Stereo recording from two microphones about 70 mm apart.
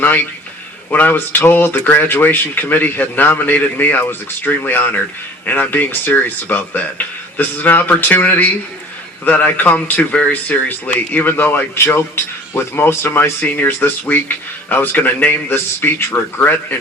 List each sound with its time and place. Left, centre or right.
0.9 s speech: left